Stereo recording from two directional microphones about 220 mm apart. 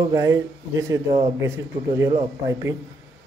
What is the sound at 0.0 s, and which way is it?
Speech, 15° right (ahead or behind).